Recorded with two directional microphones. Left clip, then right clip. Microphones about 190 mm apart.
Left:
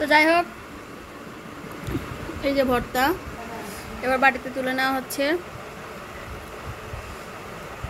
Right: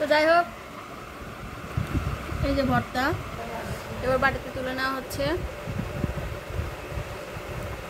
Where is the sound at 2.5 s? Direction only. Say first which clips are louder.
Left 3 dB; 15° left (ahead or behind).